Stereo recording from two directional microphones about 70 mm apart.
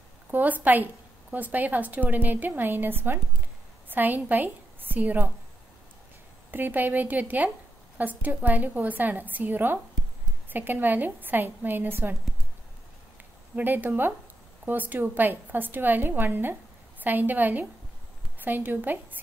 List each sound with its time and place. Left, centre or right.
0.3 s a woman's voice: right
6.5 s a woman's voice: right
13.6 s a woman's voice: right